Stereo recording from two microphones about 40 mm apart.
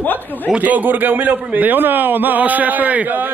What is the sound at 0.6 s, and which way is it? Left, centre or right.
A man's voice, right.